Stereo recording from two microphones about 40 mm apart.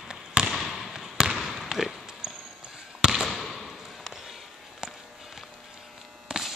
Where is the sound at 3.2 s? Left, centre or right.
Centre.